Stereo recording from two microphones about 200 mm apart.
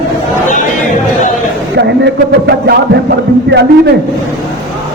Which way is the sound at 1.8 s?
55° right (ahead or behind).